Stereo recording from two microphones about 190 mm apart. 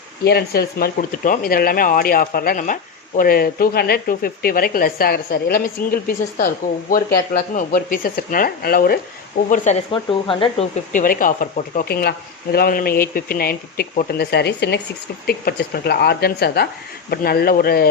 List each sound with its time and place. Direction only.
0.3 s speech: 55° left (ahead or behind)
9.9 s speech: 25° left (ahead or behind)
10.9 s a woman's voice: 45° left (ahead or behind)